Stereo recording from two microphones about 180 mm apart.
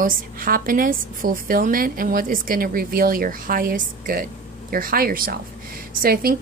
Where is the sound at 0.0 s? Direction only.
50° right (ahead or behind).